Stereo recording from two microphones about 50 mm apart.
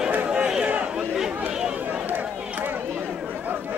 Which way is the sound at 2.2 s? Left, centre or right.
Right.